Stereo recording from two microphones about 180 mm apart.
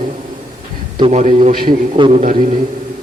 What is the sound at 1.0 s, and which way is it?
A man's voice, 40° right (ahead or behind).